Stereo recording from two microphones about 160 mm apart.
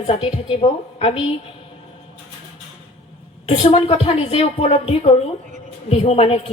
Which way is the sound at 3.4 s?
40° left (ahead or behind).